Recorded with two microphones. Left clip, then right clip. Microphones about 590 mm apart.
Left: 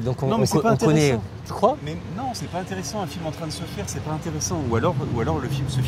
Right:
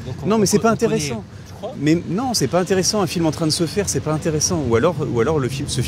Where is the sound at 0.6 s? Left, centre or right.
Right.